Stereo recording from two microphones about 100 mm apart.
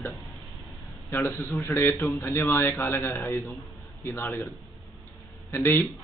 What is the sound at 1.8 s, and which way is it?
A man's voice, 20° left (ahead or behind).